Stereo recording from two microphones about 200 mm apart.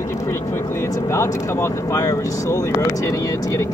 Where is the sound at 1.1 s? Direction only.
15° left (ahead or behind).